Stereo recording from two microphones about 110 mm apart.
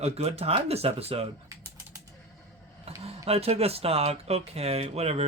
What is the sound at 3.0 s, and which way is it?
Speech, 65° right (ahead or behind).